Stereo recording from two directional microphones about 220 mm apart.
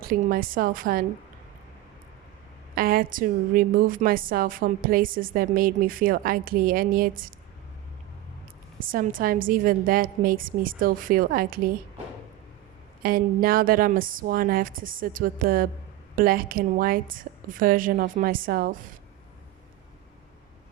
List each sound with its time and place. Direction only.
0.0 s a woman's voice: 40° right (ahead or behind)
2.7 s a woman's voice: 40° right (ahead or behind)
8.9 s a woman's voice: 40° right (ahead or behind)
13.0 s a woman's voice: 40° right (ahead or behind)